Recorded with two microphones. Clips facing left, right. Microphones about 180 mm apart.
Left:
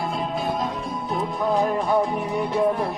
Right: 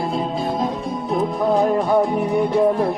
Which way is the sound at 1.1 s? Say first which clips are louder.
Right 5 dB; 35° right (ahead or behind).